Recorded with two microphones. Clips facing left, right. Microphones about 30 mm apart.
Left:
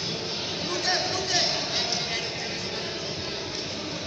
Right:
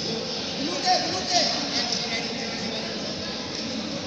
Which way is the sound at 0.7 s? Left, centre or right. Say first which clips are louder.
Right 3 dB; right.